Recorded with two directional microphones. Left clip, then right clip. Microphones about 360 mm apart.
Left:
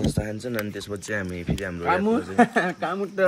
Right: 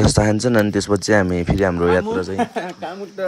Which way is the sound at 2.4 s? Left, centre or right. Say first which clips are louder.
Left 2 dB; left.